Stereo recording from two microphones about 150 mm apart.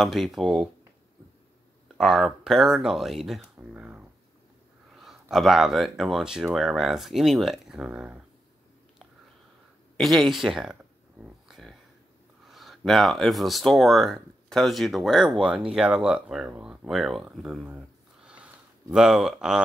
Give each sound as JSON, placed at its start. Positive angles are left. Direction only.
{"t": 0.0, "sound": "speech", "side_deg": 0}
{"t": 2.0, "sound": "speech", "side_deg": 0}
{"t": 9.9, "sound": "a sound", "side_deg": 0}
{"t": 12.4, "sound": "speech", "side_deg": 0}